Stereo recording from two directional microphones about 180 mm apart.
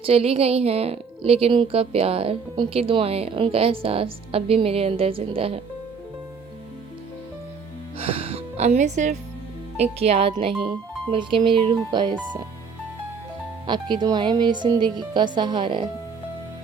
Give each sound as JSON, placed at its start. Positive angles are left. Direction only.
{"t": 0.0, "sound": "a woman's voice", "side_deg": -35}
{"t": 7.9, "sound": "music", "side_deg": -30}
{"t": 9.7, "sound": "a woman's voice", "side_deg": -35}
{"t": 13.7, "sound": "speech", "side_deg": -25}